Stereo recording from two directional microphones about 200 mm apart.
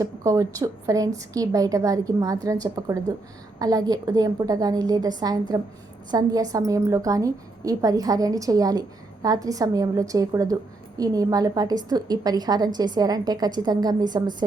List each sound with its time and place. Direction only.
0.0 s a woman's voice: 15° right (ahead or behind)